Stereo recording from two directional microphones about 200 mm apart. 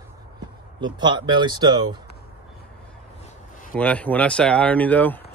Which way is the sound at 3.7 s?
5° left (ahead or behind).